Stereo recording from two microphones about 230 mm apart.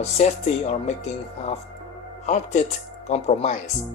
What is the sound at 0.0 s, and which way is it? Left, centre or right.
Speech, left.